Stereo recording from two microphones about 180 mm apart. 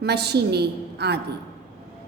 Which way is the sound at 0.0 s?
65° right (ahead or behind).